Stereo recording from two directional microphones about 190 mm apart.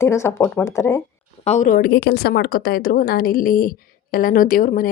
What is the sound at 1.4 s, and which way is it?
A woman's voice, 40° left (ahead or behind).